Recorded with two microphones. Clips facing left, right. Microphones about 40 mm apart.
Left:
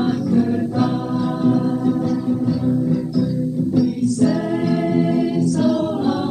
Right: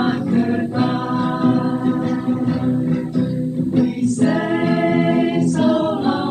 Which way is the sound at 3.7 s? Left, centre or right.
Right.